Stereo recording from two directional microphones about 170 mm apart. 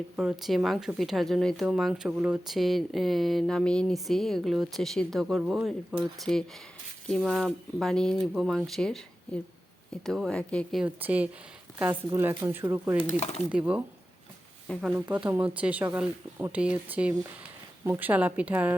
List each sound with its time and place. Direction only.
0.2 s speech: centre (ahead or behind)
10.8 s speech: 10° right (ahead or behind)
13.0 s speech: 35° left (ahead or behind)
13.5 s speech: 10° right (ahead or behind)